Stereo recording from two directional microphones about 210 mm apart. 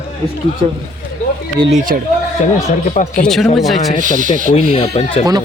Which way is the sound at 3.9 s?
40° right (ahead or behind).